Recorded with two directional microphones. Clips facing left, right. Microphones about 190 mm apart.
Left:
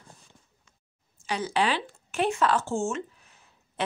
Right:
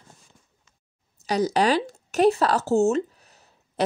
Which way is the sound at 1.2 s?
40° right (ahead or behind).